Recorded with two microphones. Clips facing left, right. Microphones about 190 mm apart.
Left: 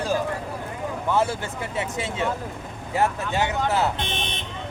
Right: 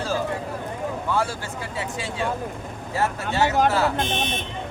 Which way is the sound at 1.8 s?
20° left (ahead or behind).